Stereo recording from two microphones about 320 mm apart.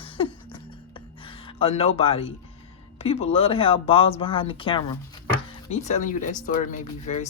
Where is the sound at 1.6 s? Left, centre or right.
Centre.